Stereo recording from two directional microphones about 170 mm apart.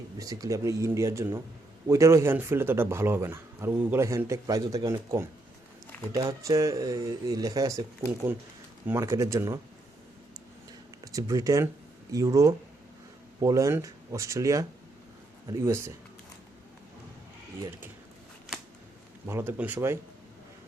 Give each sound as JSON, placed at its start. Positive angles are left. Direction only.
{"t": 0.2, "sound": "speech", "side_deg": -20}
{"t": 8.9, "sound": "speech", "side_deg": -15}
{"t": 11.0, "sound": "speech", "side_deg": -20}
{"t": 17.6, "sound": "speech", "side_deg": -15}
{"t": 19.3, "sound": "speech", "side_deg": -15}